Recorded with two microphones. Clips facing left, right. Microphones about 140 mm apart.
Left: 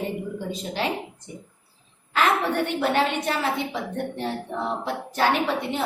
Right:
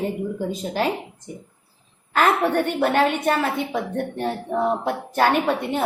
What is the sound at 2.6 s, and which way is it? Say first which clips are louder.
Speech: right 3 dB; 50° right (ahead or behind).